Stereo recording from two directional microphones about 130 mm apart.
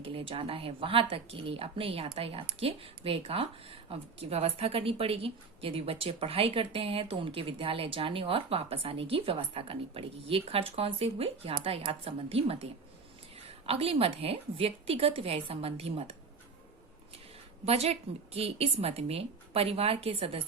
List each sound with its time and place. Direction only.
0.0 s speech: 45° right (ahead or behind)
13.7 s speech: 50° right (ahead or behind)
17.7 s speech: 55° right (ahead or behind)